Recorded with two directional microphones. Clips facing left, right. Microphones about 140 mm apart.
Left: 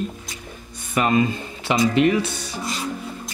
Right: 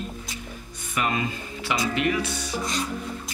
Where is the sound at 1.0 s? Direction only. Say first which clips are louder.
Left 7 dB; 35° left (ahead or behind).